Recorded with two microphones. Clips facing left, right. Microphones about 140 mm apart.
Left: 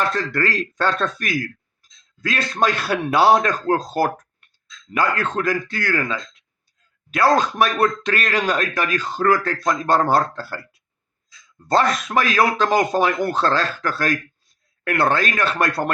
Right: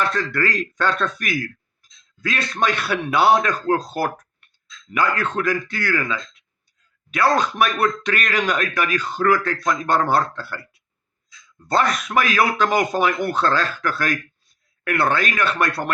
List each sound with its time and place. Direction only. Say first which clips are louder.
0.0 s speech: left 1 dB; 40° left (ahead or behind)
11.7 s speech: left 1 dB; 35° left (ahead or behind)